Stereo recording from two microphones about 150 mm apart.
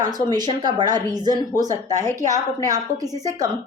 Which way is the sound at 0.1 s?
25° right (ahead or behind).